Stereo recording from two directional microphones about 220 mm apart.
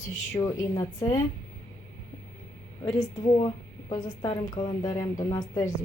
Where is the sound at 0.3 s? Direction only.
15° left (ahead or behind).